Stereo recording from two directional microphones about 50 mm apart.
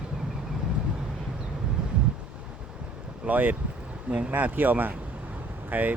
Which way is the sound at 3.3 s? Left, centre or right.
Right.